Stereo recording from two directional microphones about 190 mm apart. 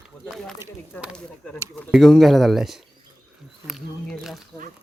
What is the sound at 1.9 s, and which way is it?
Speech, centre (ahead or behind).